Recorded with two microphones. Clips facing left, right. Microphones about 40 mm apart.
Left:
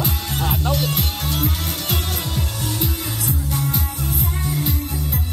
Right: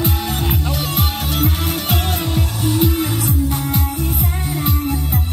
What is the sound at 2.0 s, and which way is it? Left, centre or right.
Music, right.